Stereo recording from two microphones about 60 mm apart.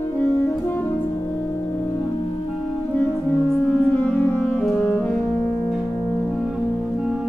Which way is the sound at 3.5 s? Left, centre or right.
Centre.